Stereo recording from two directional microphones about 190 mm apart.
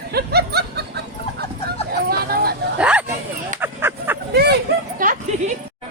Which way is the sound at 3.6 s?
10° right (ahead or behind).